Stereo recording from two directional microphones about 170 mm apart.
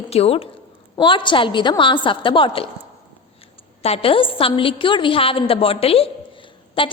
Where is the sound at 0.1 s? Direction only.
35° left (ahead or behind).